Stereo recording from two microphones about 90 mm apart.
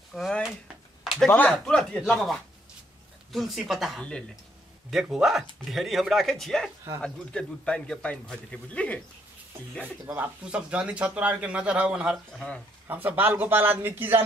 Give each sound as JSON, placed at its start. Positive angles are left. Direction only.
{"t": 0.1, "sound": "a sound", "side_deg": 0}
{"t": 1.3, "sound": "a man's voice", "side_deg": 15}
{"t": 10.4, "sound": "speech", "side_deg": -15}
{"t": 12.4, "sound": "a man's voice", "side_deg": 10}
{"t": 12.9, "sound": "speech", "side_deg": -20}